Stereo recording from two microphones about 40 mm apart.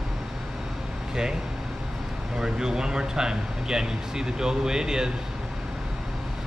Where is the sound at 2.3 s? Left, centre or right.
Centre.